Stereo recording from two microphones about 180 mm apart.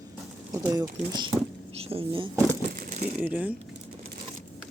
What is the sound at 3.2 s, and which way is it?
Speech, 10° right (ahead or behind).